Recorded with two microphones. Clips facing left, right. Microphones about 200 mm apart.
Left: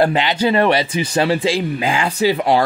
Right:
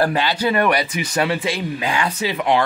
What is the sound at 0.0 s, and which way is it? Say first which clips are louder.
Speech: left 3 dB; 20° left (ahead or behind).